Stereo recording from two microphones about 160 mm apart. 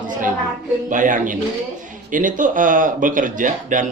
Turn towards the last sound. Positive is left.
turn(degrees=-55)  # may be behind; listen again after turning